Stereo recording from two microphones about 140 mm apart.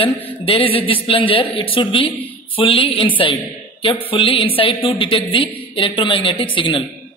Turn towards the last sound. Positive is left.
turn(degrees=35)  # may be behind; listen again after turning